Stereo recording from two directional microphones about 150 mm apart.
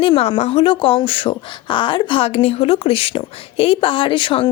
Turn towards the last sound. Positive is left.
turn(degrees=35)  # may be behind; listen again after turning